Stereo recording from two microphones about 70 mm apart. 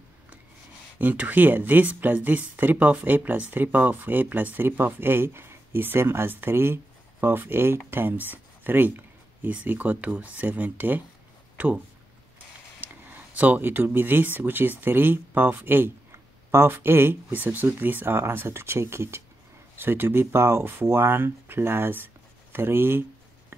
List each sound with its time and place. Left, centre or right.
0.9 s speech: right
11.5 s a sound: right
13.4 s speech: right